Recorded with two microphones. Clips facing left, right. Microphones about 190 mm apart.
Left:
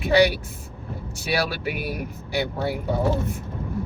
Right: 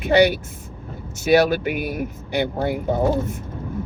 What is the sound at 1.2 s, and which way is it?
Speech, 45° right (ahead or behind).